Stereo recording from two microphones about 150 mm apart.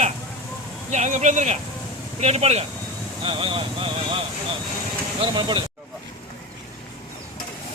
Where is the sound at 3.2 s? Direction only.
35° right (ahead or behind).